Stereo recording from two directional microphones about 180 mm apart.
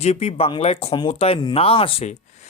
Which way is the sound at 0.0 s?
35° left (ahead or behind).